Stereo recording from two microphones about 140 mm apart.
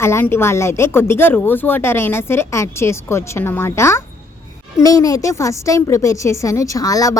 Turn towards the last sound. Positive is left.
turn(degrees=25)  # may be behind; listen again after turning